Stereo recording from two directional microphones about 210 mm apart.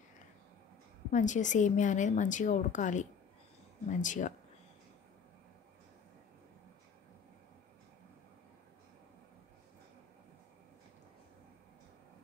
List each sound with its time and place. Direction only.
1.1 s a woman's voice: 35° left (ahead or behind)